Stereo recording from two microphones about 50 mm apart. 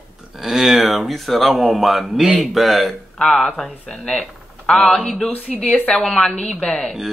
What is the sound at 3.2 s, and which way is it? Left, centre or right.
Speech, centre.